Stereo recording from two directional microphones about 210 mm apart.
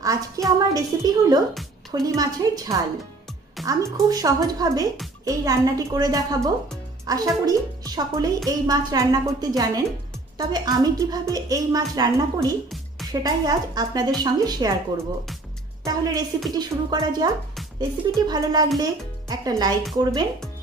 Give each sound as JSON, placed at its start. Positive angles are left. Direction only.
{"t": 0.0, "sound": "a sound", "side_deg": -15}
{"t": 1.9, "sound": "a woman's voice", "side_deg": -20}
{"t": 15.8, "sound": "a woman's voice", "side_deg": -15}